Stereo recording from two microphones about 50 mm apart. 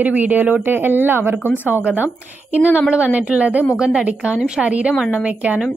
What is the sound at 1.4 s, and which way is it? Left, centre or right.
Speech, left.